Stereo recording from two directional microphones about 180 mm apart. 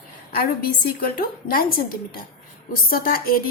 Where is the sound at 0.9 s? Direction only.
55° left (ahead or behind).